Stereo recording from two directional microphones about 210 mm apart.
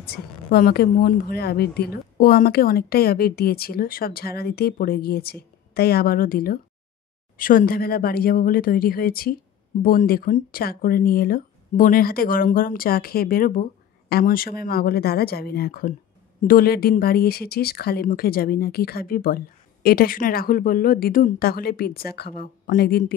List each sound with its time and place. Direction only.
0.0 s speech: 45° left (ahead or behind)